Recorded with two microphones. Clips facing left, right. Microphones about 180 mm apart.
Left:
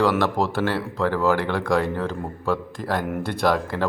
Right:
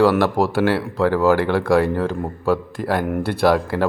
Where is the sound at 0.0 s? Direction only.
10° right (ahead or behind).